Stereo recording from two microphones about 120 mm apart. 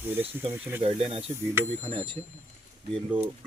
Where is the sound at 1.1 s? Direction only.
55° right (ahead or behind).